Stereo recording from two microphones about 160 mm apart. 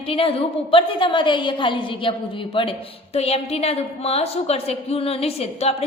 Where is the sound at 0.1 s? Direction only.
35° left (ahead or behind).